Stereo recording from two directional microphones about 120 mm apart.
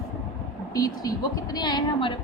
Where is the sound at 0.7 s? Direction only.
30° left (ahead or behind).